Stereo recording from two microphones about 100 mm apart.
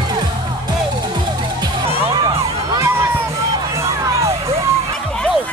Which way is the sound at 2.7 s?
25° right (ahead or behind).